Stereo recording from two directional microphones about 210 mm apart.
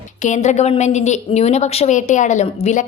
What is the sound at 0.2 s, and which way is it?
A woman's voice, 35° left (ahead or behind).